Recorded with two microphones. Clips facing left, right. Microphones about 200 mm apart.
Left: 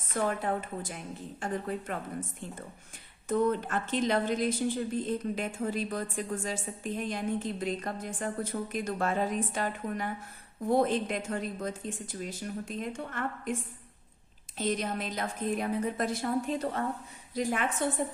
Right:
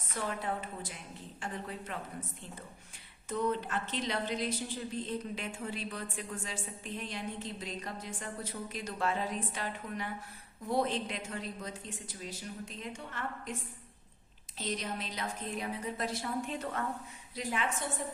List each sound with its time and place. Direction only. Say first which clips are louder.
0.1 s a woman's voice: left 6 dB; 50° left (ahead or behind)
3.2 s a woman's voice: left 5 dB; 50° left (ahead or behind)
14.6 s a woman's voice: left 6 dB; 50° left (ahead or behind)
17.3 s a woman's voice: left 5 dB; 50° left (ahead or behind)